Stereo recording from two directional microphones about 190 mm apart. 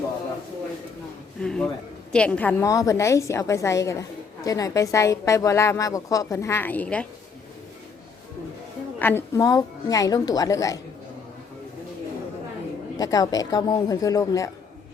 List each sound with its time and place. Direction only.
1.4 s a man's voice: 5° left (ahead or behind)
9.0 s a woman's voice: 10° left (ahead or behind)
13.0 s speech: 20° left (ahead or behind)